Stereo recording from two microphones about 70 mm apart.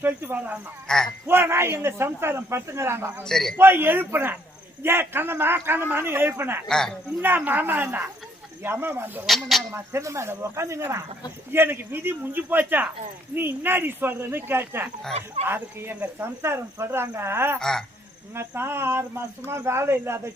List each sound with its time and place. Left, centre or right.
0.0 s speech: right
0.9 s a man's voice: centre
1.3 s speech: right
3.2 s a man's voice: centre
3.6 s speech: right
6.7 s a man's voice: centre
7.2 s speech: right
9.2 s speech: centre
9.7 s speech: right
17.6 s a man's voice: centre
18.3 s speech: right